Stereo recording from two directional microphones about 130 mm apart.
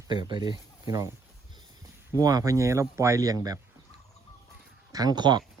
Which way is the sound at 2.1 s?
30° right (ahead or behind).